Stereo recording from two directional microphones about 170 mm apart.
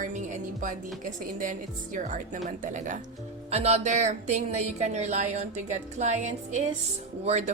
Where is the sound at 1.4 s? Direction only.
50° right (ahead or behind).